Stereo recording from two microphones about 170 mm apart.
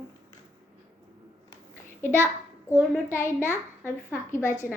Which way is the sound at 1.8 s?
15° left (ahead or behind).